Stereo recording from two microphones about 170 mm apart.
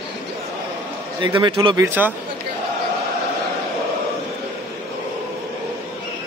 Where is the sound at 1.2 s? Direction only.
30° right (ahead or behind).